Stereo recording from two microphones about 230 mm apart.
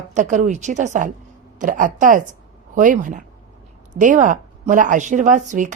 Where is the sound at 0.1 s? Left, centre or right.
Right.